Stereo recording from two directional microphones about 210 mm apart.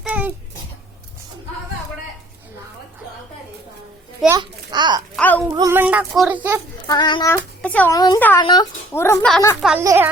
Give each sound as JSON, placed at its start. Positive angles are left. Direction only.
{"t": 0.0, "sound": "a sound", "side_deg": -5}
{"t": 4.3, "sound": "a child's voice", "side_deg": -20}
{"t": 5.1, "sound": "speech", "side_deg": 10}
{"t": 5.5, "sound": "speech", "side_deg": -15}
{"t": 6.8, "sound": "a child's voice", "side_deg": 20}
{"t": 7.6, "sound": "a woman's voice", "side_deg": 5}
{"t": 7.9, "sound": "a woman's voice", "side_deg": 20}
{"t": 9.6, "sound": "a child's voice", "side_deg": 0}
{"t": 9.8, "sound": "speech", "side_deg": -15}